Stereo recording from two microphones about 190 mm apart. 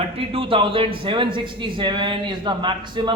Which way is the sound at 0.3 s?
30° right (ahead or behind).